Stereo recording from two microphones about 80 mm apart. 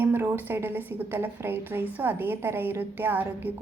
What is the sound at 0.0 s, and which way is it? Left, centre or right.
A woman's voice, right.